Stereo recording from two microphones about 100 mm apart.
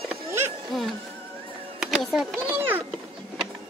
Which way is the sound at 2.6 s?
20° right (ahead or behind).